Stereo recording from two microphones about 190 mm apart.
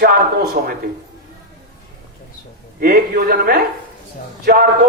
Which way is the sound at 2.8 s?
50° right (ahead or behind).